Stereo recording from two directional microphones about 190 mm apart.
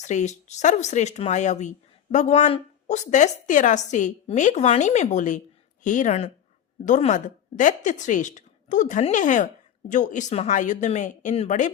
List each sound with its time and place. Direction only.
0.0 s a woman's voice: 40° left (ahead or behind)